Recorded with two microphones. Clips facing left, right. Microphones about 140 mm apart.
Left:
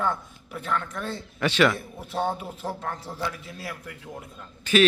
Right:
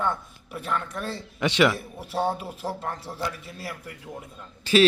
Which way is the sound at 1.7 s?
10° right (ahead or behind).